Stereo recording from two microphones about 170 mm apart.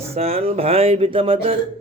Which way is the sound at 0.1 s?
35° right (ahead or behind).